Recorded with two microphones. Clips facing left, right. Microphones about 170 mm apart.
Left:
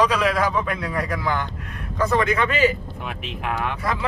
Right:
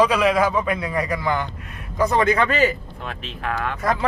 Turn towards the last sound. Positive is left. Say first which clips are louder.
# right 4 dB
turn(degrees=-45)  # may be behind; listen again after turning